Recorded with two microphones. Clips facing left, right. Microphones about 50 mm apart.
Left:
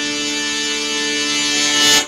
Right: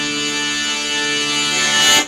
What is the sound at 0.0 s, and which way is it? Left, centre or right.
Bagpipes, centre.